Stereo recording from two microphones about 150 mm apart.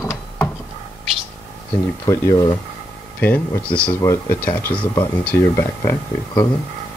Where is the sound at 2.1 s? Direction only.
25° left (ahead or behind).